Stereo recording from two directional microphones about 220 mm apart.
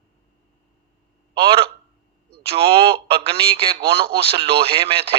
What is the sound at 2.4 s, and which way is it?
Speech, 25° right (ahead or behind).